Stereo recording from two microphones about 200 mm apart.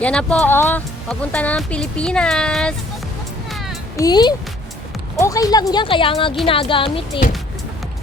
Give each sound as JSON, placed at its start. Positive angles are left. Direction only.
{"t": 0.0, "sound": "speech", "side_deg": 5}
{"t": 3.5, "sound": "music", "side_deg": 0}
{"t": 3.9, "sound": "speech", "side_deg": 20}